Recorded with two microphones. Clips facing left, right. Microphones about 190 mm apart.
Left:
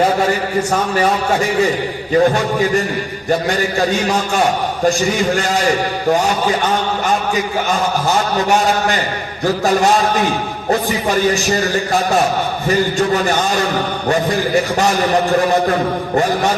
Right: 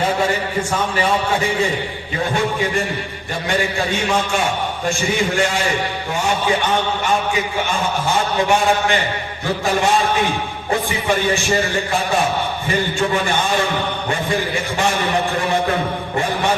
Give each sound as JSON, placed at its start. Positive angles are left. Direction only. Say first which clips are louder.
{"t": 2.1, "sound": "a man's voice", "louder": "left 7 dB", "side_deg": 40}
{"t": 7.7, "sound": "a man's voice", "louder": "left 5 dB", "side_deg": 40}
{"t": 10.7, "sound": "a man's voice", "louder": "left 3 dB", "side_deg": 40}
{"t": 12.6, "sound": "a man's voice", "louder": "left 6 dB", "side_deg": 40}